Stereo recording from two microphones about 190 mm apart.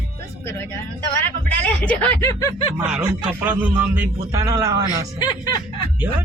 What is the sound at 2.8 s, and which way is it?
Speech, 5° right (ahead or behind).